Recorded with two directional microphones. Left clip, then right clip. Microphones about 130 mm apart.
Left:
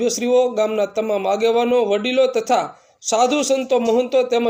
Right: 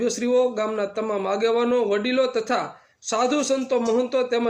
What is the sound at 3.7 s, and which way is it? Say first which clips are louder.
Speech: left 4 dB; 25° left (ahead or behind).